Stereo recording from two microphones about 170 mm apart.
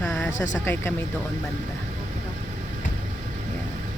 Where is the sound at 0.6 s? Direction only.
15° left (ahead or behind).